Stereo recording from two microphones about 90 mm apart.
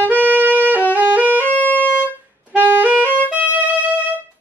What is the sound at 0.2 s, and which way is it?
Music, 20° right (ahead or behind).